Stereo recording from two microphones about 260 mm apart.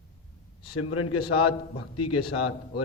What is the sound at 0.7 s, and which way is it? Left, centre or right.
A man's voice, left.